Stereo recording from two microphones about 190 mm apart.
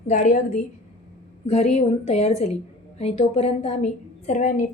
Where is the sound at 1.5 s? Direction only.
35° left (ahead or behind).